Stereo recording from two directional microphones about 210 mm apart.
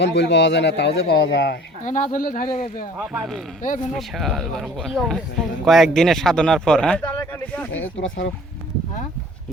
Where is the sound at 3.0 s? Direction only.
5° right (ahead or behind).